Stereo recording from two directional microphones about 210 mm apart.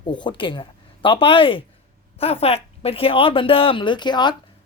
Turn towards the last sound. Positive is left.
turn(degrees=20)  # may be behind; listen again after turning